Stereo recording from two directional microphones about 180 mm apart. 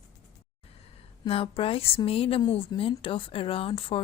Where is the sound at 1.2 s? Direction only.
30° left (ahead or behind).